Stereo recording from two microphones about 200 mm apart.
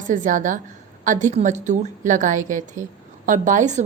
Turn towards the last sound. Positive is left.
turn(degrees=-35)  # may be behind; listen again after turning